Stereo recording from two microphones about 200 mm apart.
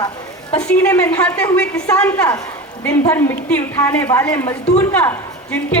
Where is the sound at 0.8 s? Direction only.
15° left (ahead or behind).